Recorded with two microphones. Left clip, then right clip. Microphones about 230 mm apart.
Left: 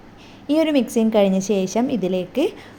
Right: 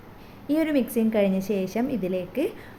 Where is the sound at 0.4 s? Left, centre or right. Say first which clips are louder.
Left 6 dB; centre.